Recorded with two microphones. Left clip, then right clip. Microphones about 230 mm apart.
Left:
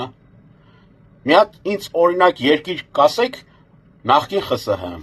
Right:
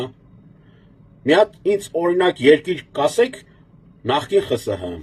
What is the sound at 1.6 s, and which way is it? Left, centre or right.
A man's voice, centre.